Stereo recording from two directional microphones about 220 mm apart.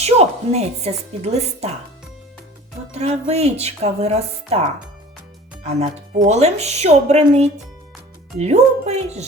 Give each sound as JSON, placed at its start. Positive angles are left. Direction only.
{"t": 0.0, "sound": "a woman's voice", "side_deg": -30}
{"t": 2.9, "sound": "speech", "side_deg": -30}
{"t": 5.6, "sound": "speech", "side_deg": -30}